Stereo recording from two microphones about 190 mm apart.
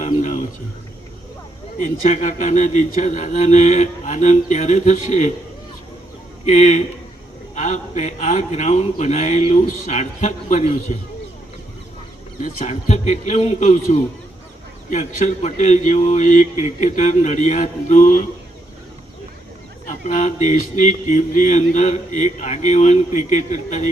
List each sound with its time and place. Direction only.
0.0 s a sound: 40° left (ahead or behind)
1.8 s mantra: 40° left (ahead or behind)
6.4 s a man's voice: 40° left (ahead or behind)
7.5 s mantra: 40° left (ahead or behind)
12.4 s mantra: 40° left (ahead or behind)
19.9 s mantra: 40° left (ahead or behind)